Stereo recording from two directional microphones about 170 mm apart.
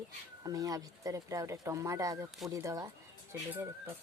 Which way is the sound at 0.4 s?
20° right (ahead or behind).